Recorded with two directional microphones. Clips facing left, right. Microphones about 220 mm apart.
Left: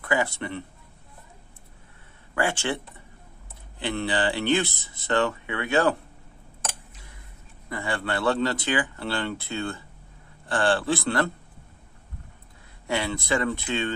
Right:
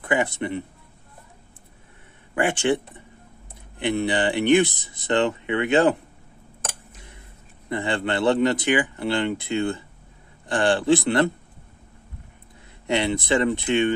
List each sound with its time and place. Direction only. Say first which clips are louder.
0.0 s speech: right 3 dB; 20° right (ahead or behind)
2.3 s speech: right 5 dB; 15° right (ahead or behind)
3.8 s speech: right 4 dB; 15° right (ahead or behind)
7.7 s speech: right 4 dB; 20° right (ahead or behind)
12.8 s speech: right 5 dB; 20° right (ahead or behind)